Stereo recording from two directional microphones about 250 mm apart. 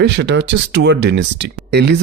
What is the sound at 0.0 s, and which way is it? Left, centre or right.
Speech, right.